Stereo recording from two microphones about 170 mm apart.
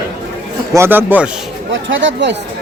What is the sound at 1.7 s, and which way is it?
Speech, 90° right.